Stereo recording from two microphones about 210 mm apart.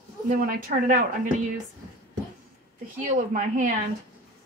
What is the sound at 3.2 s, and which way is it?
Speech, 40° right (ahead or behind).